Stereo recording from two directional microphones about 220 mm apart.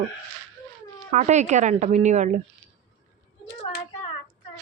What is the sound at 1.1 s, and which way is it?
A woman's voice, 30° right (ahead or behind).